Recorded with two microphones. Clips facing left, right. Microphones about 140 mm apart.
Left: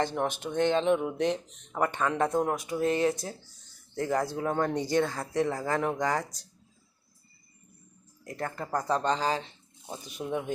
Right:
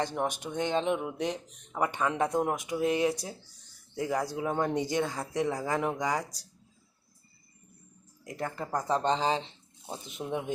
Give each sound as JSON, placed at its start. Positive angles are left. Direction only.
{"t": 0.0, "sound": "speech", "side_deg": -15}
{"t": 8.2, "sound": "speech", "side_deg": -15}